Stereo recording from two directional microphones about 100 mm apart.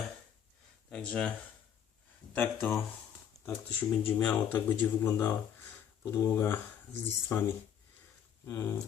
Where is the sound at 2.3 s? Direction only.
20° left (ahead or behind).